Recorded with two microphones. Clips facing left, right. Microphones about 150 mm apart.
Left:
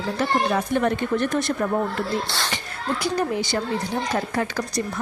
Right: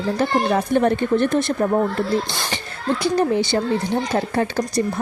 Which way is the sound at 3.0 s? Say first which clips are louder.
Right 6 dB; 25° right (ahead or behind).